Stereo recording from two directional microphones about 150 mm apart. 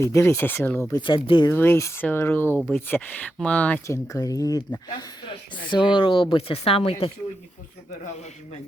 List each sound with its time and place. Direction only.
0.0 s speech: 20° left (ahead or behind)
0.9 s speech: 30° left (ahead or behind)
1.5 s speech: 15° left (ahead or behind)
2.6 s speech: centre (ahead or behind)
2.8 s speech: 10° left (ahead or behind); by 7.1 s 40° left (ahead or behind)